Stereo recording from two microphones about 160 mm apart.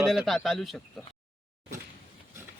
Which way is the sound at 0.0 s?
Centre (ahead or behind).